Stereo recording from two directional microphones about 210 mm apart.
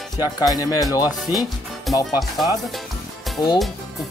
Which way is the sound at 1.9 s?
Centre (ahead or behind).